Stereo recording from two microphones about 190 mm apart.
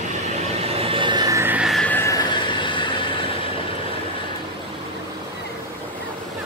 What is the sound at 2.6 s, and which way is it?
Vehicle, 25° left (ahead or behind).